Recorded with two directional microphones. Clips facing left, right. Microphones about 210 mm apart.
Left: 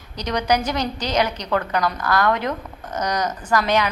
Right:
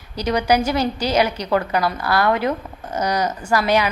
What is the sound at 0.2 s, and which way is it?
A woman's voice, 10° right (ahead or behind).